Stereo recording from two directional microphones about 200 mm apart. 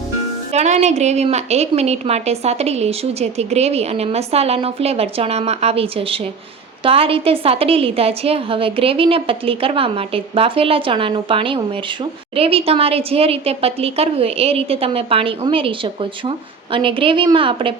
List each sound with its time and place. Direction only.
0.5 s a woman's voice: 35° right (ahead or behind)